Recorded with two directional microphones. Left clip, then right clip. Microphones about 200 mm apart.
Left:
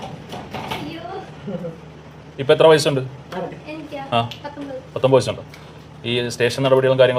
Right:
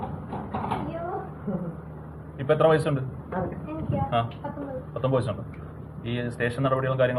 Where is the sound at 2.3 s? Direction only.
70° left (ahead or behind).